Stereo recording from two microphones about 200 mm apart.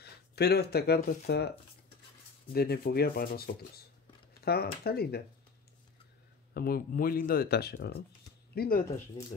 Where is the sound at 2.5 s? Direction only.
50° left (ahead or behind).